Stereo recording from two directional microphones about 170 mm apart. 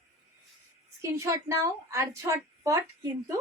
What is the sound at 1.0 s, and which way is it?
A woman's voice, 20° right (ahead or behind).